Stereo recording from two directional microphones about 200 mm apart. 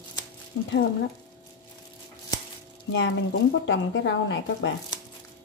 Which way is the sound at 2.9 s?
70° left (ahead or behind).